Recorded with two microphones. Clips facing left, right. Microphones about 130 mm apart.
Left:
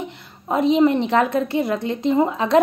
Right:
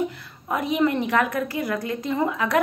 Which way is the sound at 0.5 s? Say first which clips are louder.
Left 6 dB; 25° left (ahead or behind).